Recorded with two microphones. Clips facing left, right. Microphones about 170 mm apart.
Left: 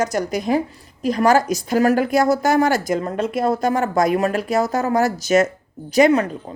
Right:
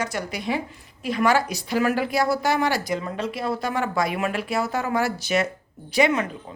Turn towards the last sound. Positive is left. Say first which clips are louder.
# left 6 dB
turn(degrees=40)  # may be behind; listen again after turning